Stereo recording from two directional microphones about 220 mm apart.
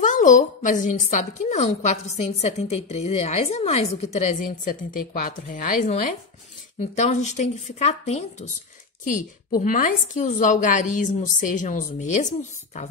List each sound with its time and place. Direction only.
0.0 s a woman's voice: 35° left (ahead or behind)